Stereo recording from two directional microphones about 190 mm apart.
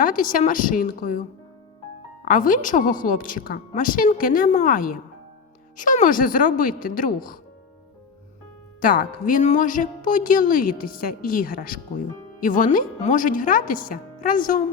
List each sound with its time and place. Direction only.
0.0 s a woman's voice: 45° left (ahead or behind)
2.2 s a woman's voice: 45° left (ahead or behind)
8.8 s a woman's voice: 45° left (ahead or behind)